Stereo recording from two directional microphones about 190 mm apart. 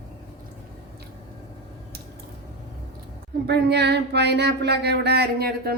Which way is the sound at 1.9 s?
55° right (ahead or behind).